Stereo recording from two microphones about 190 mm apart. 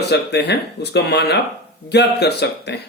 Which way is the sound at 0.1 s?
60° left (ahead or behind).